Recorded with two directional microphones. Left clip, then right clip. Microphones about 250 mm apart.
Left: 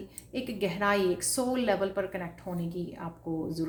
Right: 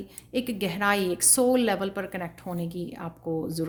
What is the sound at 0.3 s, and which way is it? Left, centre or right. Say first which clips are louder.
Speech: right 3 dB; right.